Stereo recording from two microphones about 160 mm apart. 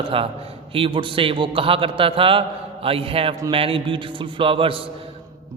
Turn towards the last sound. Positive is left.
turn(degrees=-35)  # may be behind; listen again after turning